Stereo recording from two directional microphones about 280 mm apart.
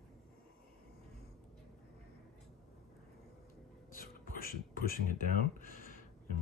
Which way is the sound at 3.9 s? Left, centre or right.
Left.